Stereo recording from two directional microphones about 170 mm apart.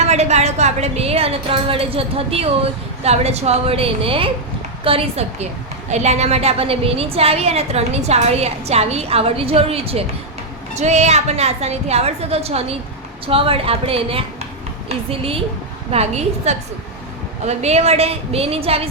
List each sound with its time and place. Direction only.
0.0 s a woman's voice: 40° right (ahead or behind)